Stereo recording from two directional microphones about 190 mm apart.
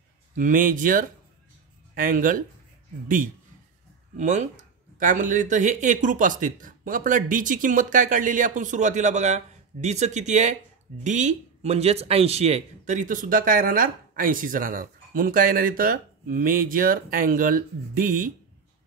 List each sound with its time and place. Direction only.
0.4 s speech: 45° right (ahead or behind)
4.2 s speech: 40° right (ahead or behind)